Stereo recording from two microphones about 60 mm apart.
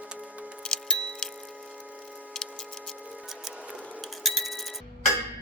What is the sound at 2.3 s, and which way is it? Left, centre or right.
Clock, centre.